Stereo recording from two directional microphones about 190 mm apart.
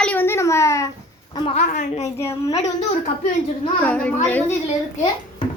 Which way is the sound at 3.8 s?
5° left (ahead or behind).